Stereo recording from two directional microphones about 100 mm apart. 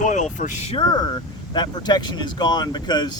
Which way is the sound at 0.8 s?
45° left (ahead or behind).